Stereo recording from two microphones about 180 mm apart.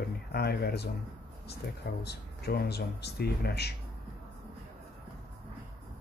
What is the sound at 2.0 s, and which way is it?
Speech, 60° left (ahead or behind).